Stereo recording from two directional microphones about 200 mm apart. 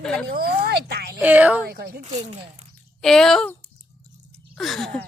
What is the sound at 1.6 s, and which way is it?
Speech, 50° right (ahead or behind).